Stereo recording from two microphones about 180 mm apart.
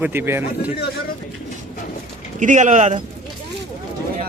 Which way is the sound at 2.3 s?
45° right (ahead or behind).